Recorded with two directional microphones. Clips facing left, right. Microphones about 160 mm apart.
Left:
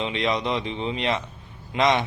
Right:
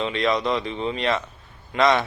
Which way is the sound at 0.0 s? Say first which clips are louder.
Right 2 dB; 20° left (ahead or behind).